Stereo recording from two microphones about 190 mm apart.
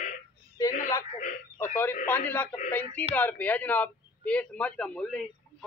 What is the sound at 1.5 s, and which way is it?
A man's voice, 10° left (ahead or behind).